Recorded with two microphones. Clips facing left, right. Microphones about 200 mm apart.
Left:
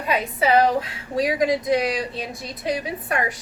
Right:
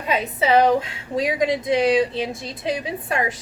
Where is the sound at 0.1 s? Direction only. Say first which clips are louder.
Right 1 dB; 25° right (ahead or behind).